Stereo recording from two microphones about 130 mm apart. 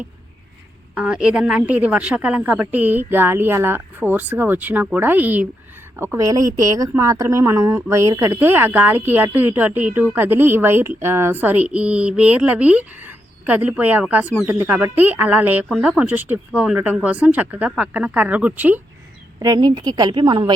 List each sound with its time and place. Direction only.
0.9 s a woman's voice: 10° right (ahead or behind)
19.4 s a woman's voice: 30° right (ahead or behind)